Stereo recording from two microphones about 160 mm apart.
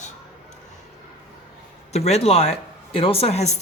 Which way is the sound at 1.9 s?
40° left (ahead or behind).